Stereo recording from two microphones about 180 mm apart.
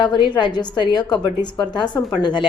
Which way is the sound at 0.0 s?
25° left (ahead or behind).